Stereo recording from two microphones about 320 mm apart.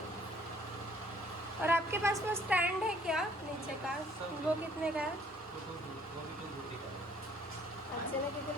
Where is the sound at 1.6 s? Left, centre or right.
Centre.